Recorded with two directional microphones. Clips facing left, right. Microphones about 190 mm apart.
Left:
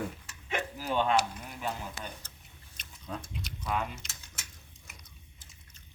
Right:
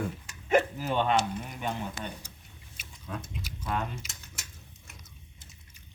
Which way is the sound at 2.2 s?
15° right (ahead or behind).